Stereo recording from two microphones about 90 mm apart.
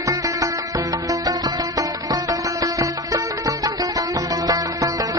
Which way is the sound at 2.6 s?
40° right (ahead or behind).